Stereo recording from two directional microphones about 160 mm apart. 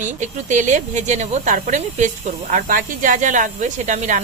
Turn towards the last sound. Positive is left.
turn(degrees=-50)  # may be behind; listen again after turning